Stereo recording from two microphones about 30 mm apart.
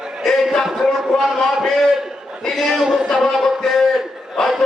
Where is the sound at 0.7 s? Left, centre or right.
Centre.